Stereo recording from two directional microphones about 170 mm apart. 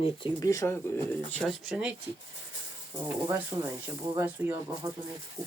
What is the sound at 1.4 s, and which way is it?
Speech, centre (ahead or behind).